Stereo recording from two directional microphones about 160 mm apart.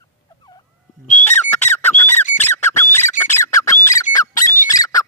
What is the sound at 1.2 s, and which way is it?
Squawk, 10° left (ahead or behind).